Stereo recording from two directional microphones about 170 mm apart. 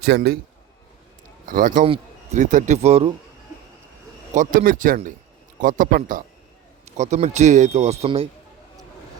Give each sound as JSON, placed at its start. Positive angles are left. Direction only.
{"t": 0.0, "sound": "a man's voice", "side_deg": -70}
{"t": 1.5, "sound": "speech", "side_deg": -55}
{"t": 1.8, "sound": "a man's voice", "side_deg": -40}
{"t": 4.4, "sound": "a man's voice", "side_deg": -55}